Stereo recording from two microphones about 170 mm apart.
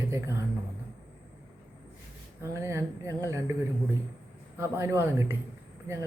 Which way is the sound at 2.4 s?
15° right (ahead or behind).